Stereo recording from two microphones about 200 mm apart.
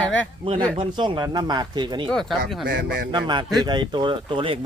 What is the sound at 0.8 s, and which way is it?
A man's voice, 25° right (ahead or behind).